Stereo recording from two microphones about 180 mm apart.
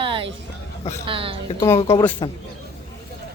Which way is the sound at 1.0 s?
30° right (ahead or behind).